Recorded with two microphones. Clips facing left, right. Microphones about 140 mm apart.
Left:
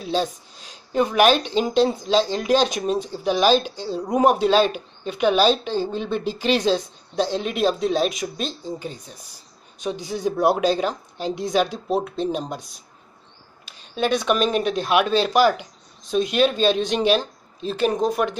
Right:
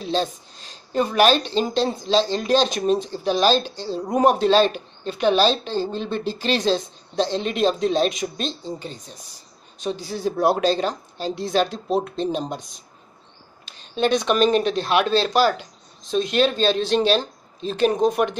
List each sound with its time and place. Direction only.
0.0 s speech: 10° left (ahead or behind)
13.7 s speech: 10° left (ahead or behind)